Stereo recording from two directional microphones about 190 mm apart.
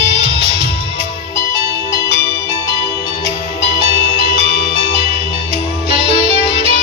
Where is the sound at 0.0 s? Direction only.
30° right (ahead or behind).